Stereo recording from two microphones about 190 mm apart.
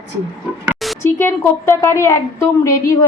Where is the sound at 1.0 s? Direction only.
15° left (ahead or behind).